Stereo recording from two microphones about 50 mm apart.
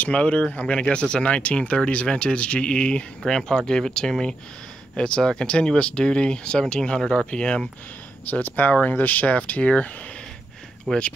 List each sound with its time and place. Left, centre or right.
0.0 s speech: left
8.3 s speech: left
10.9 s speech: centre